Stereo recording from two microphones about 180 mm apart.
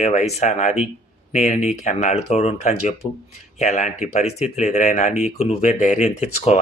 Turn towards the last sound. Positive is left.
turn(degrees=40)  # may be behind; listen again after turning